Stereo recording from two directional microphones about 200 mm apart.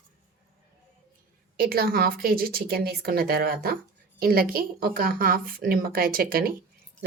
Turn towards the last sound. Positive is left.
turn(degrees=-45)  # may be behind; listen again after turning